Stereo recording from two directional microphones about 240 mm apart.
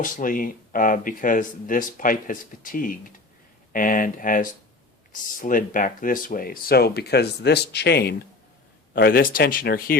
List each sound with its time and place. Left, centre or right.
0.0 s speech: left